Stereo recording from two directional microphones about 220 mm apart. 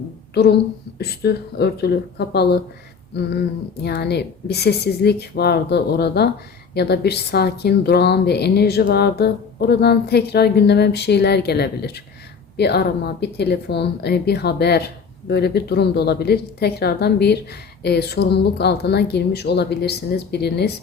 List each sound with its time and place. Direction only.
0.3 s a woman's voice: 50° left (ahead or behind)
3.8 s a woman's voice: 45° left (ahead or behind)